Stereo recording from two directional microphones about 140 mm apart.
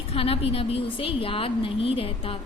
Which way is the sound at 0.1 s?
45° left (ahead or behind).